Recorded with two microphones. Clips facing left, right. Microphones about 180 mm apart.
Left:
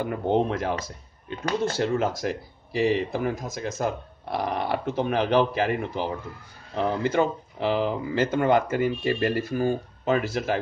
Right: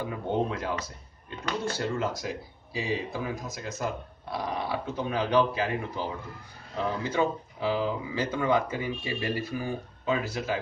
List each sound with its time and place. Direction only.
0.0 s speech: 65° left (ahead or behind)
9.7 s speech: 75° left (ahead or behind)